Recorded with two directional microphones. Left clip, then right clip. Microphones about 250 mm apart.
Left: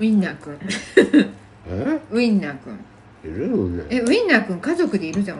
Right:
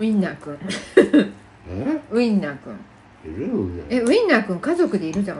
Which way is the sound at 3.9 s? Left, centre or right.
Centre.